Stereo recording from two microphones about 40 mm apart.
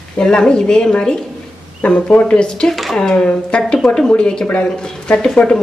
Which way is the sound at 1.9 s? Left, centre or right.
Left.